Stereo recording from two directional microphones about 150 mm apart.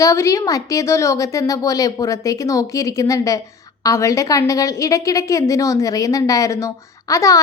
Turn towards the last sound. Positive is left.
turn(degrees=20)  # may be behind; listen again after turning